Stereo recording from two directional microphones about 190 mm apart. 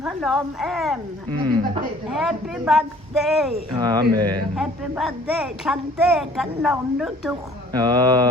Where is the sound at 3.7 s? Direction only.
20° right (ahead or behind).